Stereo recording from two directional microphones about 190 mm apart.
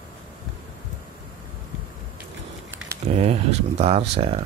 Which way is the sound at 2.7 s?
10° right (ahead or behind).